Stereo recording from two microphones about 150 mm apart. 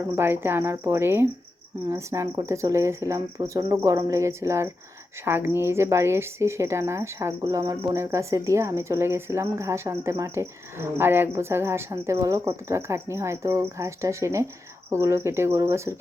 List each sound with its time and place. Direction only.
0.0 s a woman's voice: 15° right (ahead or behind)